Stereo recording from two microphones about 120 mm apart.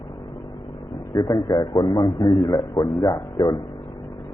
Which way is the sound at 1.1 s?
45° left (ahead or behind).